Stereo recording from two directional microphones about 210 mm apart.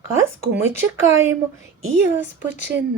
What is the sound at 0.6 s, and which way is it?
Speech, 10° right (ahead or behind).